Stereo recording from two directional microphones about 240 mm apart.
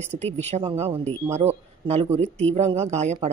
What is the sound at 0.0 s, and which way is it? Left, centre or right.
Speech, right.